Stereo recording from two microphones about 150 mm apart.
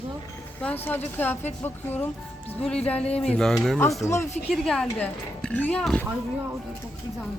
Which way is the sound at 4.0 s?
20° left (ahead or behind).